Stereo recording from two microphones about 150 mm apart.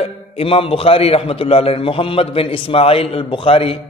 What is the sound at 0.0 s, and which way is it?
A man's voice, 40° left (ahead or behind).